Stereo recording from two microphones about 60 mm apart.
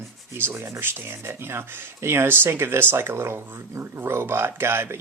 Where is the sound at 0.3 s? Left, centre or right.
Right.